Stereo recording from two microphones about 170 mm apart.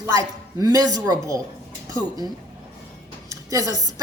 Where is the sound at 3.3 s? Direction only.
20° right (ahead or behind).